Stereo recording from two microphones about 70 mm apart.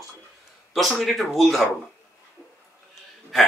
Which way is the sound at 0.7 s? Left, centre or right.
Centre.